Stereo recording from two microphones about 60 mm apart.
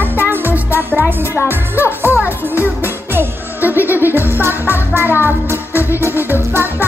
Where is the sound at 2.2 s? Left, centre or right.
Left.